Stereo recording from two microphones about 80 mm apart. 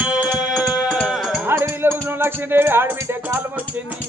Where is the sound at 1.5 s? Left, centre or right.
Right.